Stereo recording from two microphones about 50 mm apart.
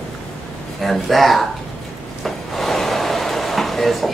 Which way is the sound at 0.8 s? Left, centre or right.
Centre.